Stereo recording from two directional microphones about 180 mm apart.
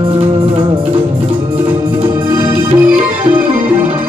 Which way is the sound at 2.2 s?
20° right (ahead or behind).